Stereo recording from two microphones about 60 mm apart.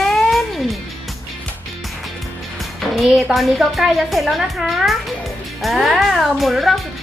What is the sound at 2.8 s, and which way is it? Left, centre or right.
Speech, centre.